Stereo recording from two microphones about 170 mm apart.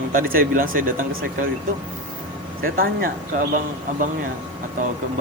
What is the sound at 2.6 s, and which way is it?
Speech, 60° right (ahead or behind).